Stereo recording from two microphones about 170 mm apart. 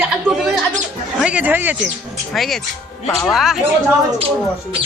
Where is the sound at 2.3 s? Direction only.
Centre (ahead or behind).